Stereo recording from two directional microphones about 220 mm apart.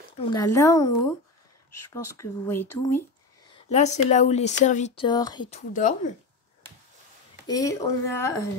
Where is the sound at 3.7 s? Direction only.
30° left (ahead or behind).